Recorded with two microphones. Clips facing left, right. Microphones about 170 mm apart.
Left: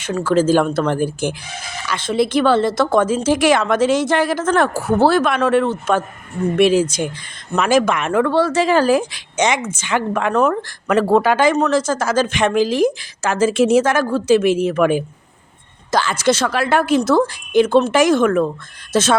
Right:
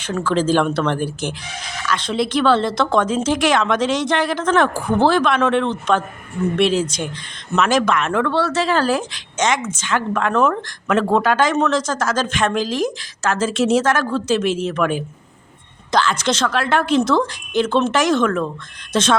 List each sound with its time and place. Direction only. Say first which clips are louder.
0.2 s speech: left 3 dB; 10° left (ahead or behind)
1.0 s speech: left 4 dB; 55° left (ahead or behind)
1.9 s speech: left 3 dB; 10° left (ahead or behind)